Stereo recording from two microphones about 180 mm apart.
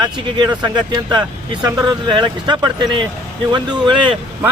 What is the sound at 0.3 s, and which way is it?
Speech, 25° right (ahead or behind).